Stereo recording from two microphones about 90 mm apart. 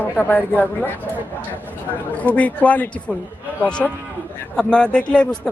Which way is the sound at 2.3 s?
15° left (ahead or behind).